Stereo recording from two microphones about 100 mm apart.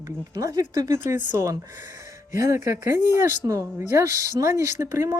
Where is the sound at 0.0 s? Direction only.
35° right (ahead or behind).